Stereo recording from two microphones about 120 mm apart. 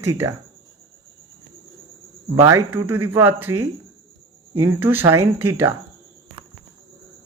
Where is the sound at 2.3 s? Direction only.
20° right (ahead or behind).